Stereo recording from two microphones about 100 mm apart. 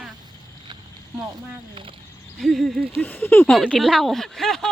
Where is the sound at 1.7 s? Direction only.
60° right (ahead or behind).